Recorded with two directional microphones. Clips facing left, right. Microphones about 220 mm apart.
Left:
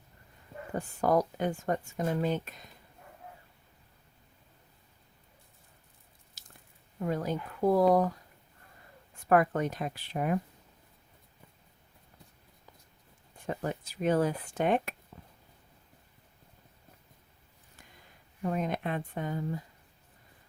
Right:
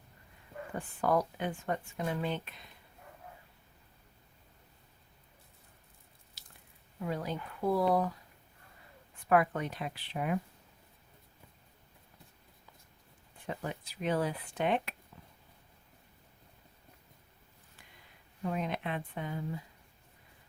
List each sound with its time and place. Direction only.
0.7 s speech: 40° left (ahead or behind)
6.4 s squish: 45° left (ahead or behind)
7.0 s speech: 45° left (ahead or behind)
9.3 s speech: 45° left (ahead or behind)
13.5 s speech: 45° left (ahead or behind)
15.1 s a sound: 45° left (ahead or behind)
18.4 s speech: 45° left (ahead or behind)